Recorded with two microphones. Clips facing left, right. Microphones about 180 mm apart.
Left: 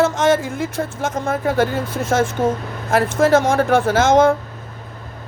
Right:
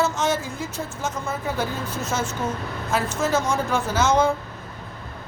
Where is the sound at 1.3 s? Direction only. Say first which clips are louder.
Left 11 dB; 90° left.